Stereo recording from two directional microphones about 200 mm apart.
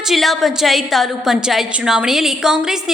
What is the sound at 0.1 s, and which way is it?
A woman's voice, centre (ahead or behind).